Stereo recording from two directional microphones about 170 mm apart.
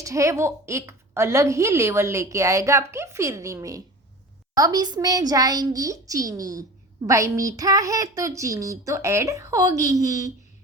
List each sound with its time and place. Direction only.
0.0 s a woman's voice: 20° right (ahead or behind)